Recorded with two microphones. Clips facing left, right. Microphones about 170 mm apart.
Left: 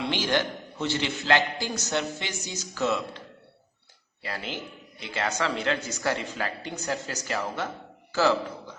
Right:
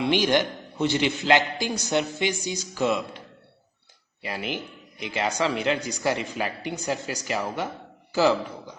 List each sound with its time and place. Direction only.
0.0 s a man's voice: 15° right (ahead or behind)
4.2 s a man's voice: 15° right (ahead or behind)